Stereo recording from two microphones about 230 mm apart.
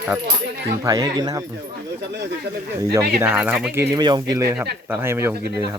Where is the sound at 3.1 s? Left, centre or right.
Centre.